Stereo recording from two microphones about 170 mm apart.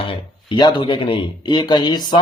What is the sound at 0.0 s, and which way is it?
Speech, 30° left (ahead or behind).